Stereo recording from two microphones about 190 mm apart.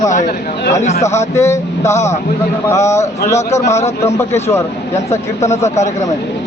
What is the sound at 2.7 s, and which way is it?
Speech, 15° left (ahead or behind).